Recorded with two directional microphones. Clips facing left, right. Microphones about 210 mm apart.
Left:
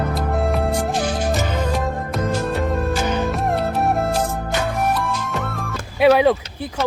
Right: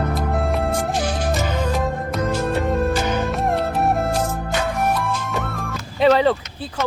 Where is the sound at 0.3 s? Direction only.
Centre (ahead or behind).